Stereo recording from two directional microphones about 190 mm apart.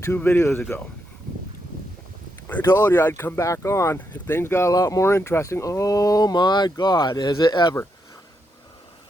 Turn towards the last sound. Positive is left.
turn(degrees=25)  # may be behind; listen again after turning